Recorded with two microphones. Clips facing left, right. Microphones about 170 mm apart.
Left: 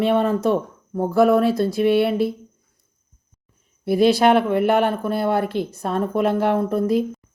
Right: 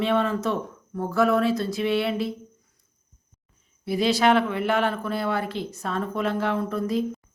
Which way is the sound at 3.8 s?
55° left (ahead or behind).